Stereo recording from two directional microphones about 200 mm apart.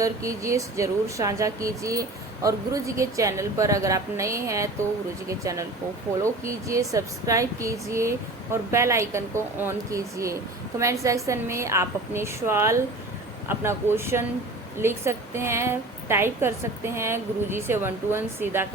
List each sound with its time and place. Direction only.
0.0 s speech: 15° right (ahead or behind)